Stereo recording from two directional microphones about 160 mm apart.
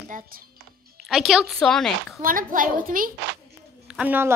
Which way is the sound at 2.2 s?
60° right (ahead or behind).